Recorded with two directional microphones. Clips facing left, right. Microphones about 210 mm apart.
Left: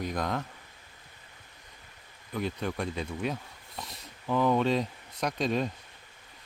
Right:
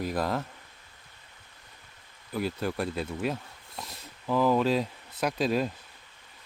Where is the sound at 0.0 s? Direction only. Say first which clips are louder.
Right 2 dB; 5° right (ahead or behind).